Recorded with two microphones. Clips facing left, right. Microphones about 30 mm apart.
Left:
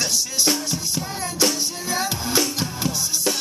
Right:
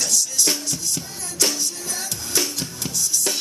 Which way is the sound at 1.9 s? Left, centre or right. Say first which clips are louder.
Left 6 dB; left.